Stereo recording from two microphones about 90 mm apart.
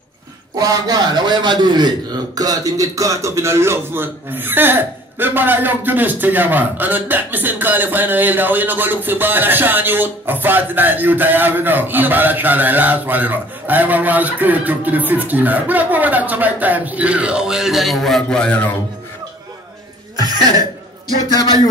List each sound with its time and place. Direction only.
0.6 s a man's voice: 45° right (ahead or behind); by 18.7 s 10° left (ahead or behind)